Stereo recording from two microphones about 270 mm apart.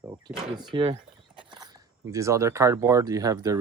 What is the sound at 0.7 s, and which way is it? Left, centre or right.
Speech, centre.